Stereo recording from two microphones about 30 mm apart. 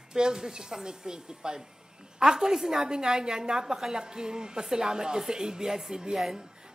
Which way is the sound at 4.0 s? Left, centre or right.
Right.